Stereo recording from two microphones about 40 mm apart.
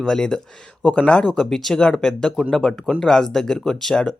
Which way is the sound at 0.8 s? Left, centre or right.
Left.